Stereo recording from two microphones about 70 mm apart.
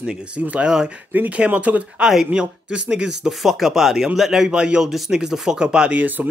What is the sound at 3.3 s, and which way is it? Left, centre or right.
Speech, centre.